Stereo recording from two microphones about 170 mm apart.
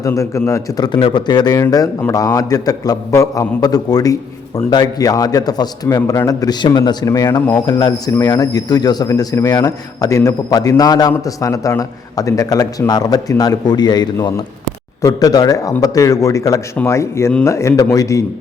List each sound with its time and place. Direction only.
0.0 s a man's voice: 20° left (ahead or behind)
0.9 s a man's voice: 30° left (ahead or behind)